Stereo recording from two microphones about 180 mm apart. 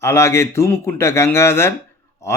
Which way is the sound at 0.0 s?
15° left (ahead or behind).